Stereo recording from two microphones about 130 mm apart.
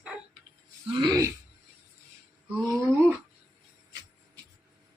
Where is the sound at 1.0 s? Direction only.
30° right (ahead or behind).